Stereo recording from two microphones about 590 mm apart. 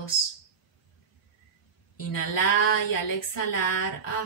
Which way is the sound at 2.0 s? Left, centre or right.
Left.